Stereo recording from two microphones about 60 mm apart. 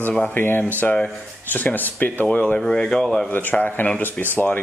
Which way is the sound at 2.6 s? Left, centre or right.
Centre.